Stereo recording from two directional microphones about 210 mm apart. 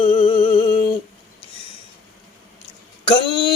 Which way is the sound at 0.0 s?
25° left (ahead or behind).